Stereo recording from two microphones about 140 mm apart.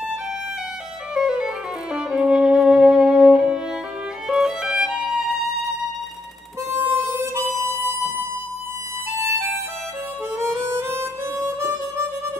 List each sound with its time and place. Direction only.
1.1 s music: 5° right (ahead or behind)
4.3 s violin: 5° right (ahead or behind)
6.7 s harmonica: 20° right (ahead or behind)
10.4 s harmonica: 20° right (ahead or behind)